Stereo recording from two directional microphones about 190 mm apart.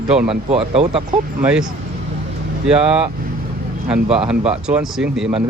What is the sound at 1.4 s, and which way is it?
Speech, 5° right (ahead or behind).